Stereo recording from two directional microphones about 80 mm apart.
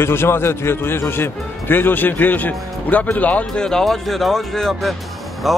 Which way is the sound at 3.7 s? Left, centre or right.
Centre.